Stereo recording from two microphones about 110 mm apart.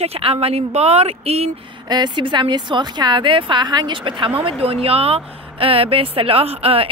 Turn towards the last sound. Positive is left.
turn(degrees=-65)  # may be behind; listen again after turning